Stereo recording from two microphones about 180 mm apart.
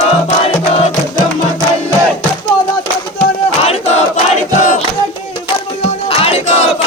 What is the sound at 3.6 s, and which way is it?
Crowd, 35° left (ahead or behind).